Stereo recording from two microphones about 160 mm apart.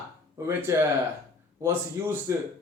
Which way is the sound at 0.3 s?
20° right (ahead or behind).